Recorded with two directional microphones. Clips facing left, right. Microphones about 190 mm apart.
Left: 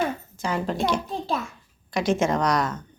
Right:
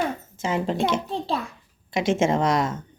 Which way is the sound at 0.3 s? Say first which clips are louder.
Right 3 dB; 25° right (ahead or behind).